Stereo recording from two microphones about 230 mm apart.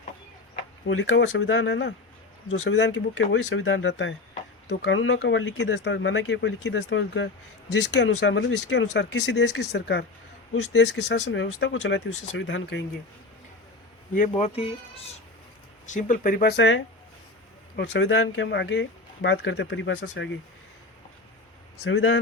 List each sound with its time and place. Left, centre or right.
0.9 s speech: left
14.2 s speech: left
21.8 s speech: left